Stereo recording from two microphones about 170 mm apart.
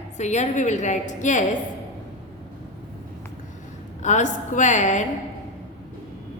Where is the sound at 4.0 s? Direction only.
45° left (ahead or behind).